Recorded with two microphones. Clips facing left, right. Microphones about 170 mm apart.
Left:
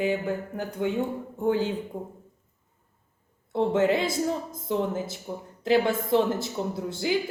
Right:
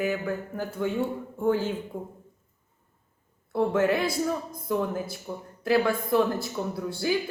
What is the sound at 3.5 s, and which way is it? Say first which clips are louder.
Speech: left 1 dB; 20° left (ahead or behind).